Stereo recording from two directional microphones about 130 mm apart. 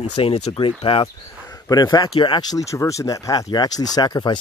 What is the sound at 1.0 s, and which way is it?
Speech, 30° left (ahead or behind).